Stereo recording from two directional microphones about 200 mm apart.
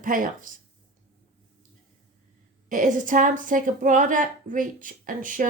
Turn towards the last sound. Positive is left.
turn(degrees=-40)  # may be behind; listen again after turning